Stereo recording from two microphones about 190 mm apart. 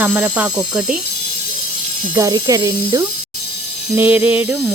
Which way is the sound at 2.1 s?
20° right (ahead or behind).